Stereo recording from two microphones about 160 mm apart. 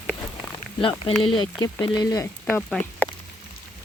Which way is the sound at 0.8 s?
35° left (ahead or behind).